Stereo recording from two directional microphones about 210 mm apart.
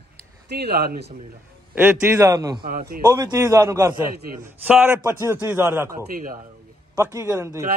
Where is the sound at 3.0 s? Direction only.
15° right (ahead or behind).